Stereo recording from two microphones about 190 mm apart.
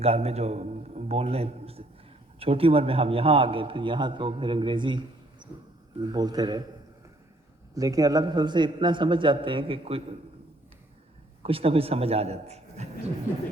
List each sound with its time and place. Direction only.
0.0 s a man's voice: 35° right (ahead or behind)
7.8 s a man's voice: 20° right (ahead or behind)
11.4 s a man's voice: 30° right (ahead or behind)